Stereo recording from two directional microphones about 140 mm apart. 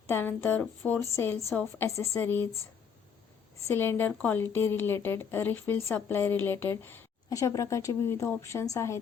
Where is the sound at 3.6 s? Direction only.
15° left (ahead or behind).